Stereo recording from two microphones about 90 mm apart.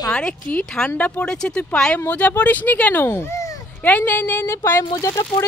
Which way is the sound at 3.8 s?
20° left (ahead or behind).